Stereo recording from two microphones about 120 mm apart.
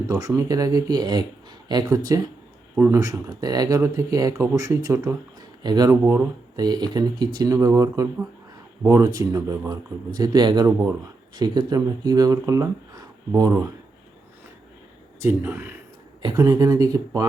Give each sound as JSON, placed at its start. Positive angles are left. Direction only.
{"t": 0.1, "sound": "speech", "side_deg": -30}
{"t": 2.7, "sound": "speech", "side_deg": -20}
{"t": 15.2, "sound": "speech", "side_deg": -15}
{"t": 16.2, "sound": "speech", "side_deg": -30}